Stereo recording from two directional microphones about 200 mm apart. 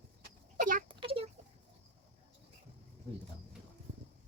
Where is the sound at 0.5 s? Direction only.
40° right (ahead or behind).